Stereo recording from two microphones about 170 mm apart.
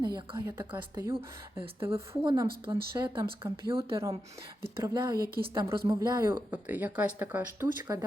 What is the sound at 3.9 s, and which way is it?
A woman's voice, 15° right (ahead or behind).